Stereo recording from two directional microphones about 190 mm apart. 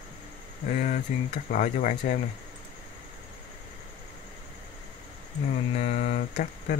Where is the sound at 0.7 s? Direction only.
45° left (ahead or behind).